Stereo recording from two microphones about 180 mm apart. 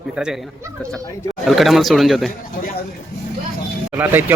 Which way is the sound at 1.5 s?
Centre (ahead or behind).